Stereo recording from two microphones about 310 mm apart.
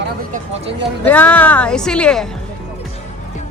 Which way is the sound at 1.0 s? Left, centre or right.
Centre.